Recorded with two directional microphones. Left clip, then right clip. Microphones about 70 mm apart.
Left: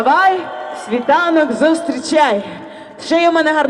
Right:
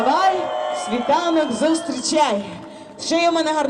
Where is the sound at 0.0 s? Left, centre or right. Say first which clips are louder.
Left 5 dB; left.